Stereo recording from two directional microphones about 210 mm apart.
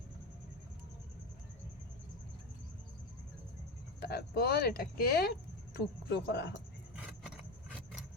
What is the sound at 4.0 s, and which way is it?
A woman's voice, 50° left (ahead or behind).